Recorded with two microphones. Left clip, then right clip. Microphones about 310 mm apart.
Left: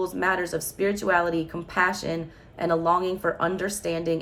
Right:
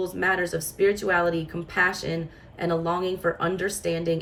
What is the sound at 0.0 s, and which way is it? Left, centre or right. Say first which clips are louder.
Speech: even; centre.